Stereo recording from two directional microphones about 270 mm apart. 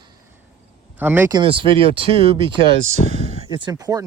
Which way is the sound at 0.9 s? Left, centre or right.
Centre.